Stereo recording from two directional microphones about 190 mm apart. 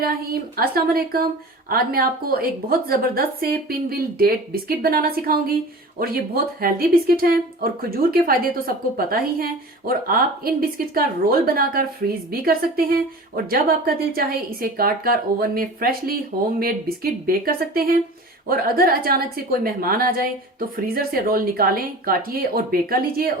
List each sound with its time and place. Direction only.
0.0 s speech: 50° right (ahead or behind)